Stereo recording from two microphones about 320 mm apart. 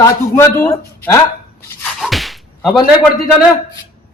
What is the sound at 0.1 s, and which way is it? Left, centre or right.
Speech, centre.